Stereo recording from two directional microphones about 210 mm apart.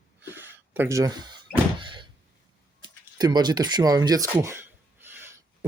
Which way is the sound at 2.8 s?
20° right (ahead or behind).